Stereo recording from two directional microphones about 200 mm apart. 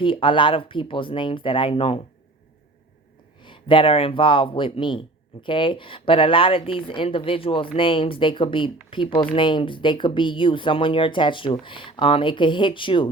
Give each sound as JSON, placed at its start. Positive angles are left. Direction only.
{"t": 0.0, "sound": "speech", "side_deg": 25}
{"t": 3.4, "sound": "speech", "side_deg": 25}